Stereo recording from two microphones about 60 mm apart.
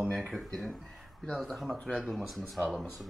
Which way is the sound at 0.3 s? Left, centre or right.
Centre.